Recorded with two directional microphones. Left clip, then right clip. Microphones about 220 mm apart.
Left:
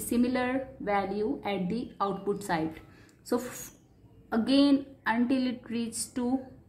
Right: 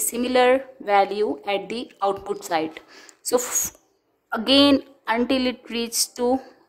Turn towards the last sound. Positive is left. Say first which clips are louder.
# right 11 dB
turn(degrees=-40)  # may be behind; listen again after turning